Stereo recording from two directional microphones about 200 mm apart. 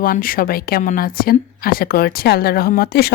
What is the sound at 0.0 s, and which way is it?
A woman's voice, 45° left (ahead or behind).